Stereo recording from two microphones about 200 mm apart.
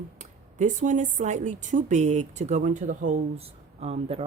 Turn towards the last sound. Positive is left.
turn(degrees=-30)  # may be behind; listen again after turning